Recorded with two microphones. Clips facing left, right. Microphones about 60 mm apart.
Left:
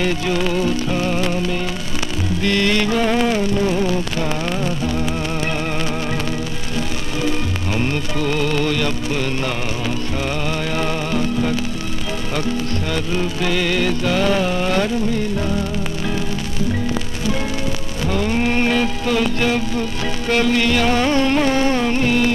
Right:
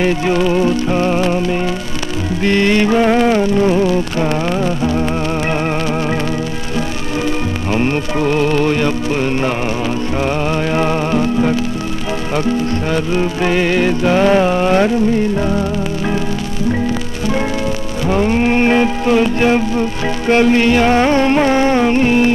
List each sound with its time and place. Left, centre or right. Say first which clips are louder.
0.0 s music: right 5 dB; right
7.7 s music: right 6 dB; right
10.7 s music: right 6 dB; right
12.9 s music: right 5 dB; right
18.0 s music: right 5 dB; right